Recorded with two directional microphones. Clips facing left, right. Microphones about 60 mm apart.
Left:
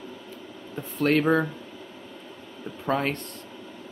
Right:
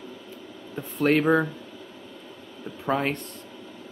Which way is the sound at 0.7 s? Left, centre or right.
Centre.